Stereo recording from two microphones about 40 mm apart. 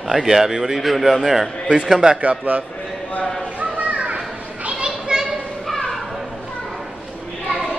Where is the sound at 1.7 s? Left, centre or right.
Right.